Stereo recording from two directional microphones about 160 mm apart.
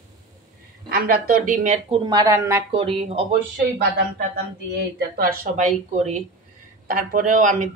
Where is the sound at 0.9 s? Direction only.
70° right (ahead or behind).